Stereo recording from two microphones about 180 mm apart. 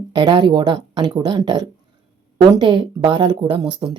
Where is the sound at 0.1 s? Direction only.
25° right (ahead or behind).